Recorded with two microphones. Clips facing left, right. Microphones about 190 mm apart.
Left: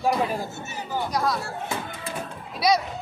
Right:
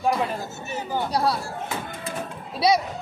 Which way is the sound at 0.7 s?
30° right (ahead or behind).